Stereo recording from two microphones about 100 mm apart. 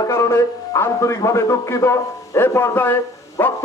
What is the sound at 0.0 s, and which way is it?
A man's voice, 30° left (ahead or behind).